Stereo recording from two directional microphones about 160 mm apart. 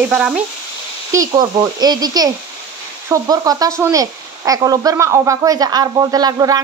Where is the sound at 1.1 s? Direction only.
20° right (ahead or behind).